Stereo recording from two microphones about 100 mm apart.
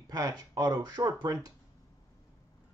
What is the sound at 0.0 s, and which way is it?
Speech, 40° right (ahead or behind).